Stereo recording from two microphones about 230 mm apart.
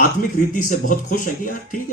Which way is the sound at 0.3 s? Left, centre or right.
Left.